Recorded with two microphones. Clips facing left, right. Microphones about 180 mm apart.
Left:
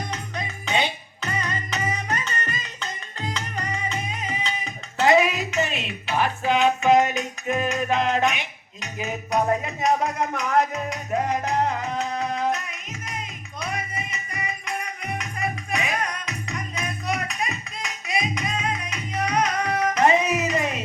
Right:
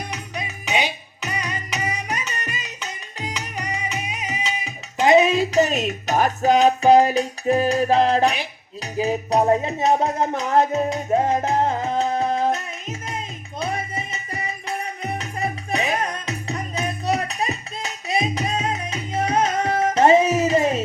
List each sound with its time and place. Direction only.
0.0 s music: 10° right (ahead or behind); by 20.8 s 30° right (ahead or behind)